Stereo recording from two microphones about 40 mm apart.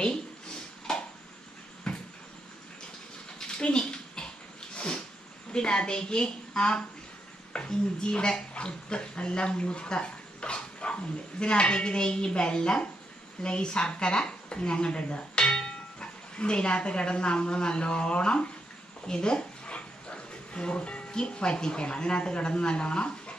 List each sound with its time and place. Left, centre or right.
0.9 s a sound: centre
3.3 s bathtub: left
4.7 s sneeze: left
5.5 s speech: left
19.0 s dog: left
21.1 s speech: left